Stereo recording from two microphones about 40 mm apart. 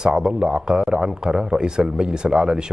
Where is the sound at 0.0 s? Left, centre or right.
Right.